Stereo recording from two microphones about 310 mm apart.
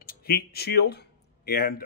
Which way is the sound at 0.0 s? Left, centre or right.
Left.